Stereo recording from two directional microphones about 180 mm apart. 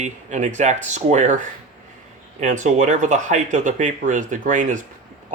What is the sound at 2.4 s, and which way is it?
Speech, 45° right (ahead or behind).